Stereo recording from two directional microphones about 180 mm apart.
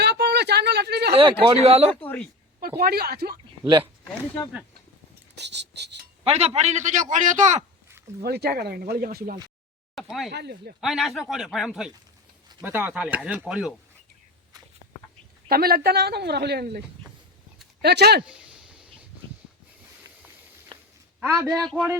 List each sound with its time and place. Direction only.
0.0 s a sound: 70° right (ahead or behind)
1.1 s speech: 30° right (ahead or behind)
2.6 s a woman's voice: 55° right (ahead or behind)
5.3 s speech: 75° right (ahead or behind)
6.2 s a man's voice: 35° right (ahead or behind)
8.2 s a woman's voice: 60° right (ahead or behind)
9.9 s speech: centre (ahead or behind)
10.3 s a woman's voice: 65° right (ahead or behind)
10.8 s speech: centre (ahead or behind)
15.4 s a woman's voice: 55° right (ahead or behind)
17.8 s a woman's voice: 65° right (ahead or behind)
18.3 s a sound: 5° right (ahead or behind)
21.2 s speech: 15° right (ahead or behind)
21.5 s speech: centre (ahead or behind)